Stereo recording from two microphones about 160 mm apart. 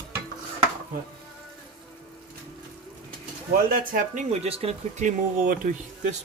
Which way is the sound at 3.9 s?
45° right (ahead or behind).